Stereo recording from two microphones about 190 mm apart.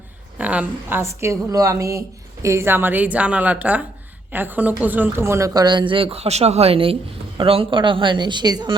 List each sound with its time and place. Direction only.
0.3 s a woman's voice: 5° right (ahead or behind)